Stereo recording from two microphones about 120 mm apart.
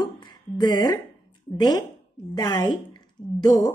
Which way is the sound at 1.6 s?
35° left (ahead or behind).